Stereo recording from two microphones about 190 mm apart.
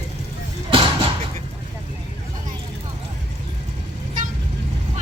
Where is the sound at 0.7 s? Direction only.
30° right (ahead or behind).